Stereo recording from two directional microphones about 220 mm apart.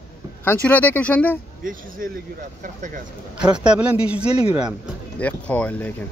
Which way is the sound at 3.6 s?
5° right (ahead or behind).